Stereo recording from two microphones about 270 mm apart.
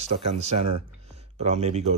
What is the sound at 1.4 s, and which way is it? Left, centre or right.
Speech, right.